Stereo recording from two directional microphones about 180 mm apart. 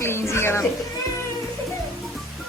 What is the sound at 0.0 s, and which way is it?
Music, 15° left (ahead or behind).